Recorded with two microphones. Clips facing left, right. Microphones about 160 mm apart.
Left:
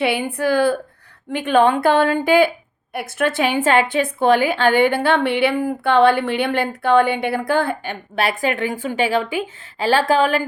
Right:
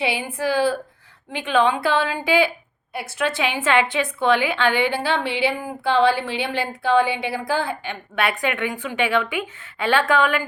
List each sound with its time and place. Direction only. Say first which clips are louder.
0.0 s a woman's voice: left 4 dB; 55° left (ahead or behind)
8.1 s a woman's voice: left 3 dB; 40° left (ahead or behind)